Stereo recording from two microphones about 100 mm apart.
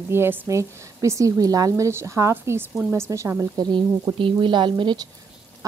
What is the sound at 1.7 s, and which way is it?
A woman's voice, 25° right (ahead or behind).